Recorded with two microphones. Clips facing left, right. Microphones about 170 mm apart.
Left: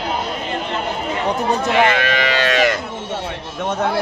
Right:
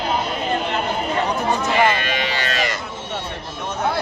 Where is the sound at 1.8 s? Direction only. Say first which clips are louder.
Left 3 dB; 75° left (ahead or behind).